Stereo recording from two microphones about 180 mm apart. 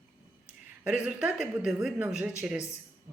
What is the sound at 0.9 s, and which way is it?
A woman's voice, 5° right (ahead or behind).